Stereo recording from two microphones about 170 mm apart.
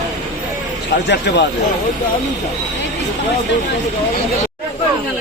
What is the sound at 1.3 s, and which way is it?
Speech, 75° left (ahead or behind).